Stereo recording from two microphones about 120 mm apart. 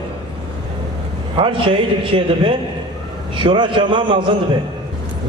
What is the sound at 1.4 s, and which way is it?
A man's voice, 45° right (ahead or behind).